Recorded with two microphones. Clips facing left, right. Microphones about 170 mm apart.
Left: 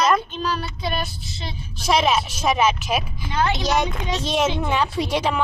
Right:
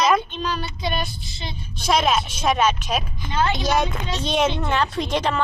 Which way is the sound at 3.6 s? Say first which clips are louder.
Even; centre (ahead or behind).